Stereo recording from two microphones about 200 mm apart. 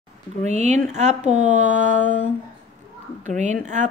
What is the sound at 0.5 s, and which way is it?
Speech, 35° right (ahead or behind).